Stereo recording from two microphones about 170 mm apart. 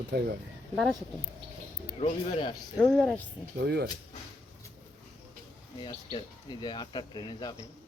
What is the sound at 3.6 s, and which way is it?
Speech, 90° right.